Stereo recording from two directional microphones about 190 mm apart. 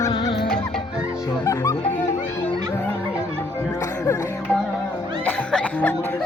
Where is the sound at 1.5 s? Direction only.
15° left (ahead or behind).